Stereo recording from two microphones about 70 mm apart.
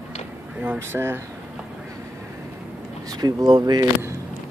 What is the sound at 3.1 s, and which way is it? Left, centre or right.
Speech, right.